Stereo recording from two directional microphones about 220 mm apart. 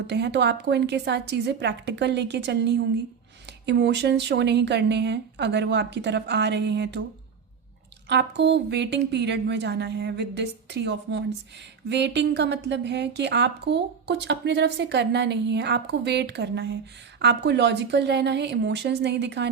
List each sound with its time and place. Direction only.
0.1 s a woman's voice: 50° right (ahead or behind)
8.1 s a woman's voice: 50° right (ahead or behind)